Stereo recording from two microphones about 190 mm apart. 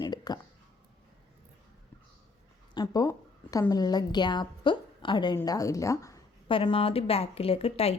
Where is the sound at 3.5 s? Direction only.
20° left (ahead or behind).